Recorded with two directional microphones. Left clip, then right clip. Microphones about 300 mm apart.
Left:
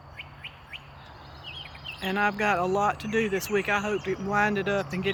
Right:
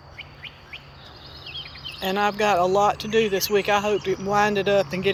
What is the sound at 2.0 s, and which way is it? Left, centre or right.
Speech, centre.